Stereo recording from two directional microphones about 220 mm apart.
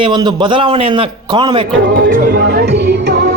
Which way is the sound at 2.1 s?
40° right (ahead or behind).